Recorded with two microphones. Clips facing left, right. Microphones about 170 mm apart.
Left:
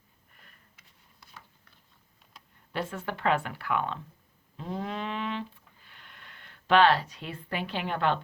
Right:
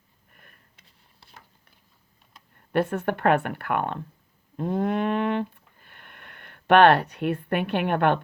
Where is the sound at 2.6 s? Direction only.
60° right (ahead or behind).